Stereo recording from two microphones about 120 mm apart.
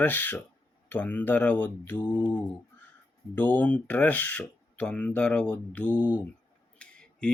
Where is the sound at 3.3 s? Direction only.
15° left (ahead or behind).